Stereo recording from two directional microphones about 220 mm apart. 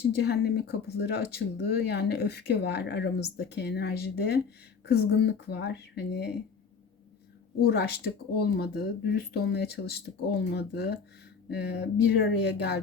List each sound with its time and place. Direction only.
0.0 s speech: 45° left (ahead or behind)
7.6 s speech: 45° left (ahead or behind)